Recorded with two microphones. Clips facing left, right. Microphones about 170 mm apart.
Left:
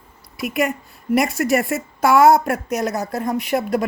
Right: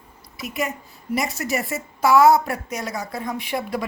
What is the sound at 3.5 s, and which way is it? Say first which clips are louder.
Speech: left 6 dB; 45° left (ahead or behind).